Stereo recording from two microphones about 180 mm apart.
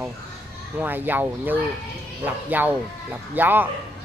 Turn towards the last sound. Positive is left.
turn(degrees=-10)  # may be behind; listen again after turning